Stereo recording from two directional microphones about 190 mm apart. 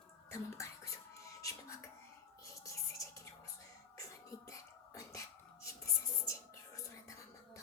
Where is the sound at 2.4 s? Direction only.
15° left (ahead or behind).